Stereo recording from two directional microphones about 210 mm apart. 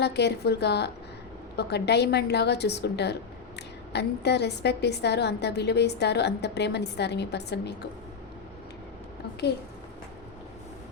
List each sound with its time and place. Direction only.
0.0 s a woman's voice: 50° left (ahead or behind)